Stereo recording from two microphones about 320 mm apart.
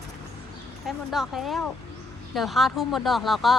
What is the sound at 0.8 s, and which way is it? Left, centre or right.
Speech, centre.